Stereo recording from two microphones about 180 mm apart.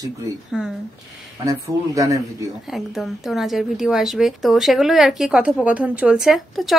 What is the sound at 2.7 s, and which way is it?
A woman's voice, centre (ahead or behind).